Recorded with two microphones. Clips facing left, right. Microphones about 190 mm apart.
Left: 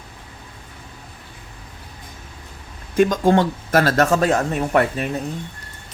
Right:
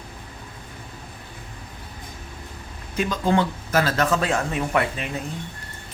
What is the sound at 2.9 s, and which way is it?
Speech, 50° left (ahead or behind).